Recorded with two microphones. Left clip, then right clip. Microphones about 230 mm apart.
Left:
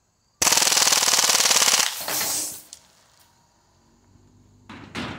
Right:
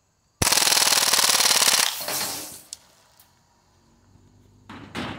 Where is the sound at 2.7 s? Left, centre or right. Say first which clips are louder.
Right 4 dB; right.